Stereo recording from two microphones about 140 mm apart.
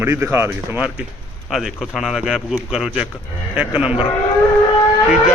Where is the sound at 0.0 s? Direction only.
15° right (ahead or behind).